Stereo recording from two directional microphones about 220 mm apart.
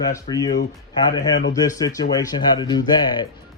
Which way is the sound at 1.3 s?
55° left (ahead or behind).